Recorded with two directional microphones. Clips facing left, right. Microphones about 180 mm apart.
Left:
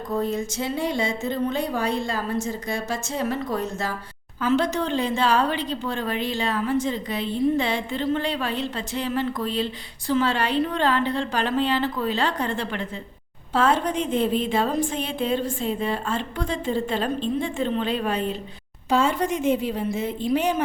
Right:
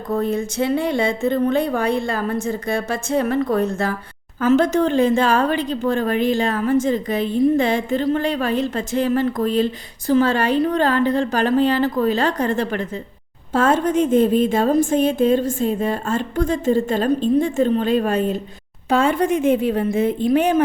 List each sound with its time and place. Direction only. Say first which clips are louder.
0.2 s a woman's voice: right 5 dB; 60° right (ahead or behind)
4.4 s speech: right 6 dB; 45° right (ahead or behind)
18.9 s a woman's voice: right 4 dB; 55° right (ahead or behind)